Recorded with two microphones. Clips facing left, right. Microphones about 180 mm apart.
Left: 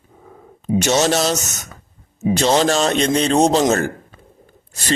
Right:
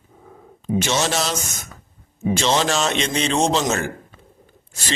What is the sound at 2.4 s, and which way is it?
A man's voice, 40° left (ahead or behind).